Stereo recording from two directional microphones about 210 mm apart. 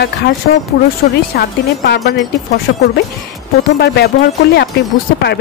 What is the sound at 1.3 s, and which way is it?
A woman's voice, 50° left (ahead or behind).